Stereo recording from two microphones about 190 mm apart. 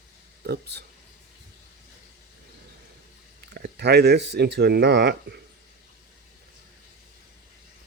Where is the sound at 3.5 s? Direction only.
60° right (ahead or behind).